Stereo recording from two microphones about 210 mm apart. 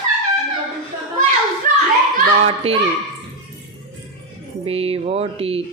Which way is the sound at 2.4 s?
25° right (ahead or behind).